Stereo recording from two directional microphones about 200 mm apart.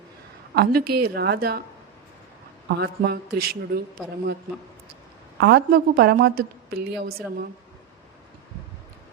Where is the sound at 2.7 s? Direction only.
50° right (ahead or behind).